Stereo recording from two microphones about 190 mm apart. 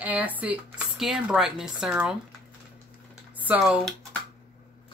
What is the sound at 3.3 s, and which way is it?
Speech, 10° right (ahead or behind).